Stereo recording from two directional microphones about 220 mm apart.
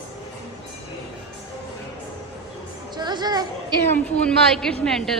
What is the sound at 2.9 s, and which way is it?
Speech, 20° right (ahead or behind).